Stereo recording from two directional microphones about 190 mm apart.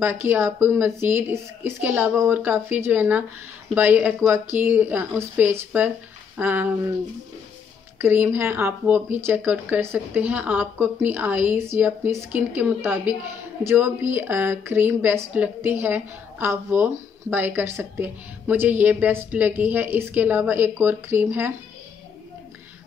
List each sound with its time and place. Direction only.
0.0 s a woman's voice: 10° right (ahead or behind)
8.0 s a woman's voice: 10° right (ahead or behind)